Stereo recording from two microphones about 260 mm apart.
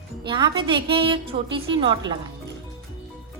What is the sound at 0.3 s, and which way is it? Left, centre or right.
A woman's voice, centre.